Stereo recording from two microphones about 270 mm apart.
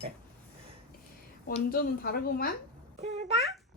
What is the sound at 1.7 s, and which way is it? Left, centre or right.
Speech, left.